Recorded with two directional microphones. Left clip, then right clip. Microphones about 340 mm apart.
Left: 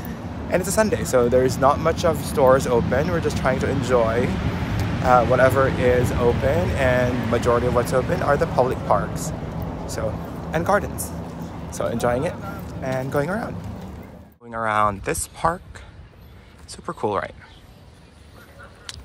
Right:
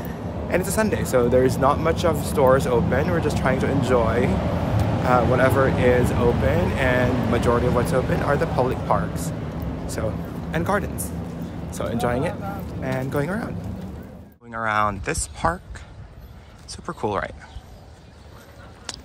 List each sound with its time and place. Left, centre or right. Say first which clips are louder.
0.0 s speech: right 2 dB; centre
14.5 s speech: left 2 dB; centre
18.9 s a sound: right 3 dB; centre